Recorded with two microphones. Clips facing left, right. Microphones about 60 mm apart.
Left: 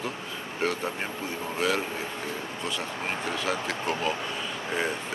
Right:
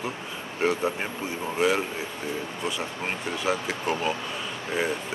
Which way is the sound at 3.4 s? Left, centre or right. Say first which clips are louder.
Right 2 dB; centre.